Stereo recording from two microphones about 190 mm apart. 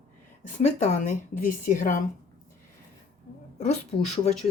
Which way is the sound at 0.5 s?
40° left (ahead or behind).